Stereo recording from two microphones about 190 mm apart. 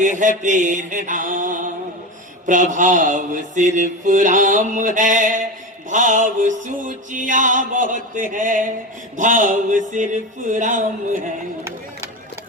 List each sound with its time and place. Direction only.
0.0 s mantra: 40° right (ahead or behind)
5.9 s music: 40° right (ahead or behind)
9.1 s mantra: 40° right (ahead or behind)